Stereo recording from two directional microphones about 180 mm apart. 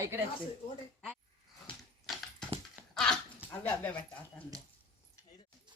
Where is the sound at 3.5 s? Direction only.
10° left (ahead or behind).